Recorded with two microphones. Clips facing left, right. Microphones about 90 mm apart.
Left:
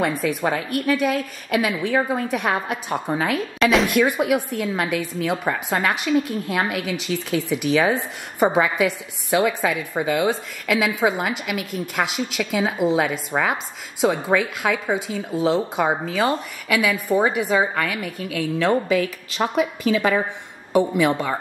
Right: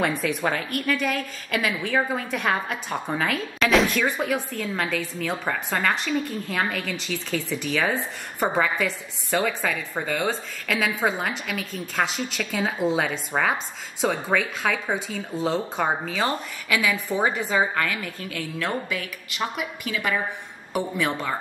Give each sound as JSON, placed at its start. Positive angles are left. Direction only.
{"t": 0.0, "sound": "a woman's voice", "side_deg": 0}
{"t": 19.3, "sound": "a woman's voice", "side_deg": 30}
{"t": 20.7, "sound": "a woman's voice", "side_deg": 15}